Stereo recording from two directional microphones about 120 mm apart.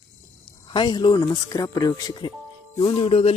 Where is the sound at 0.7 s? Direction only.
40° left (ahead or behind).